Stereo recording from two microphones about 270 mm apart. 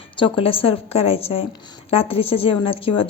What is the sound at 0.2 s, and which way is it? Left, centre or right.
A woman's voice, centre.